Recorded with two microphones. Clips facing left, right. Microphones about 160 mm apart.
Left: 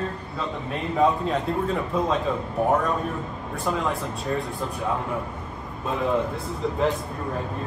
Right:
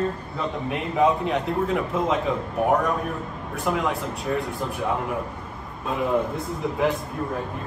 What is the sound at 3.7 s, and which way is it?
Speech, 15° right (ahead or behind).